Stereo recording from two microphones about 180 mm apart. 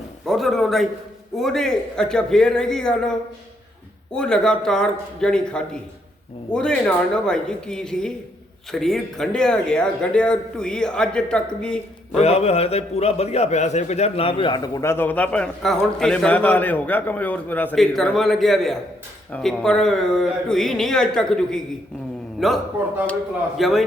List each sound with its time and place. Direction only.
0.3 s speech: centre (ahead or behind)
4.1 s speech: 5° left (ahead or behind)
12.1 s a man's voice: 35° left (ahead or behind); by 23.8 s centre (ahead or behind)